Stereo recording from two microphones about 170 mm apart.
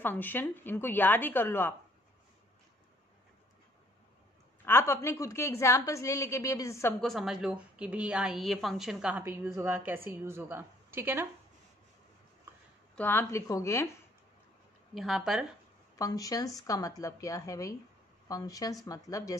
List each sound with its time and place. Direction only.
0.0 s a woman's voice: 10° left (ahead or behind)
4.6 s a woman's voice: 15° left (ahead or behind)
7.0 s a woman's voice: centre (ahead or behind)
12.9 s a woman's voice: 10° left (ahead or behind)
15.0 s a woman's voice: centre (ahead or behind)
16.0 s a woman's voice: 20° left (ahead or behind)